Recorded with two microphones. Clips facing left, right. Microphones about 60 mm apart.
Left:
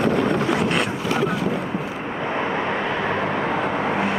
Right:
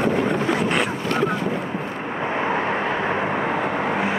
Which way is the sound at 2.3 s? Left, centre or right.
Centre.